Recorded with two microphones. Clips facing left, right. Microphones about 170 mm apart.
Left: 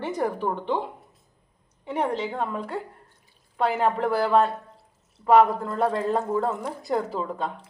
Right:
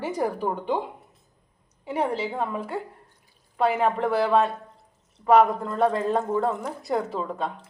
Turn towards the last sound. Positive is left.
turn(degrees=0)  # may be behind; listen again after turning